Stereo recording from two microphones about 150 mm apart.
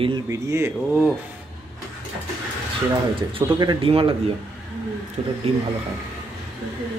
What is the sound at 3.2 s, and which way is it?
Speech, 30° right (ahead or behind).